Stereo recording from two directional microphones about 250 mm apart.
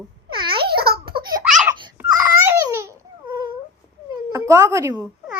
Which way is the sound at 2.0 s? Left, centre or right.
Centre.